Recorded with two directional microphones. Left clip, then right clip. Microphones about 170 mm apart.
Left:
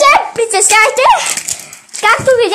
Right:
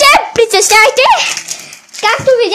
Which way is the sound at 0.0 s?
40° right (ahead or behind).